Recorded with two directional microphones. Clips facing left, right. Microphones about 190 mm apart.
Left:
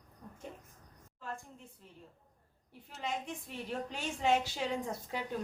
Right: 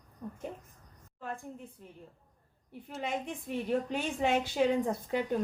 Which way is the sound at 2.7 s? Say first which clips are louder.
Right 4 dB; 55° right (ahead or behind).